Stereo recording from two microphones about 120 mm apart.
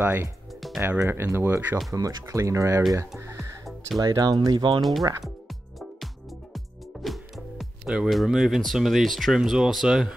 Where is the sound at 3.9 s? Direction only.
35° right (ahead or behind).